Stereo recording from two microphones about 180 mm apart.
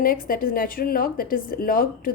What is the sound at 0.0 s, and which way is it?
A woman's voice, 50° left (ahead or behind).